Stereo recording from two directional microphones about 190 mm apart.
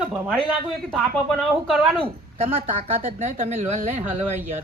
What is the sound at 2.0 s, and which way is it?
A woman's voice, 30° right (ahead or behind).